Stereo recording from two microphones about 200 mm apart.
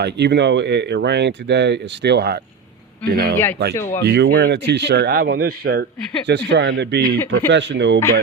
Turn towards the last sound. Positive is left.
turn(degrees=-60)  # may be behind; listen again after turning